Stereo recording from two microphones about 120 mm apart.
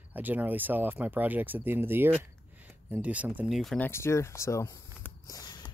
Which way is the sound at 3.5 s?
Centre (ahead or behind).